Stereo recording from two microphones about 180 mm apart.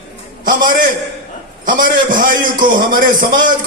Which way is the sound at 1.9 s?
50° right (ahead or behind).